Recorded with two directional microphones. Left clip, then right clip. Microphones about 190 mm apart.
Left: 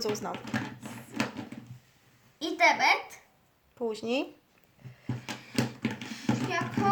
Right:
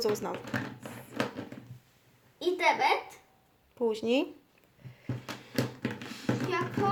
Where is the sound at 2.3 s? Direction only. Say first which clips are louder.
Left 2 dB; 15° right (ahead or behind).